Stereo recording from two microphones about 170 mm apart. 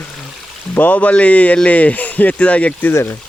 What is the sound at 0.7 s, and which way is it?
Speech, 10° left (ahead or behind).